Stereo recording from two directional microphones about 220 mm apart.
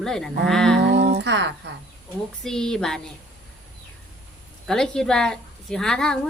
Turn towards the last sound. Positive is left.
turn(degrees=5)  # may be behind; listen again after turning